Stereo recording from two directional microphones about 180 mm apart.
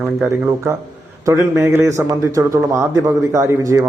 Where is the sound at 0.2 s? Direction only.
15° right (ahead or behind).